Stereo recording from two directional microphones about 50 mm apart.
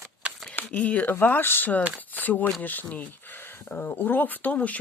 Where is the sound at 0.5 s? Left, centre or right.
Left.